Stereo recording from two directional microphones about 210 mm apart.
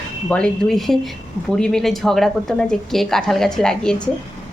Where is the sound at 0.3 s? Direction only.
5° left (ahead or behind).